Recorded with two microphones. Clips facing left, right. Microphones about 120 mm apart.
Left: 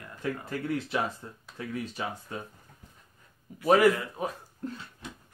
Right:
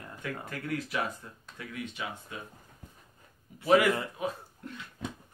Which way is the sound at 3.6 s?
35° left (ahead or behind).